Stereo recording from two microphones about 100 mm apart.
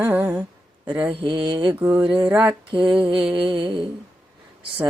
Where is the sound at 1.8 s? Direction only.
20° right (ahead or behind).